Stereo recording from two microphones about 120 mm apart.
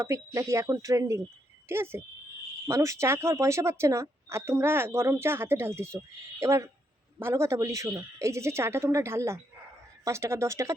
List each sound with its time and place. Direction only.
0.0 s speech: 25° right (ahead or behind)